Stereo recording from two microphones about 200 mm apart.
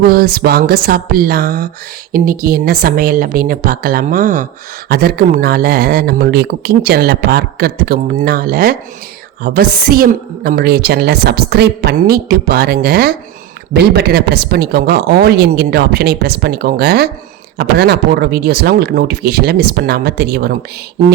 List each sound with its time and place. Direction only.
0.0 s speech: 50° right (ahead or behind)